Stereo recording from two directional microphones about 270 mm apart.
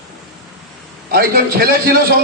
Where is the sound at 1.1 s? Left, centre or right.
Right.